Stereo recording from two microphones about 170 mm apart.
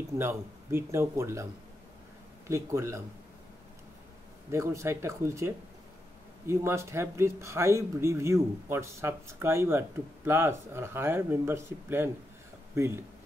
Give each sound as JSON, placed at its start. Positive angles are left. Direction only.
{"t": 0.2, "sound": "speech", "side_deg": -15}
{"t": 4.5, "sound": "speech", "side_deg": -15}